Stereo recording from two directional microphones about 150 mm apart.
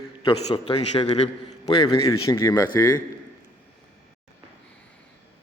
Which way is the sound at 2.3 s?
20° left (ahead or behind).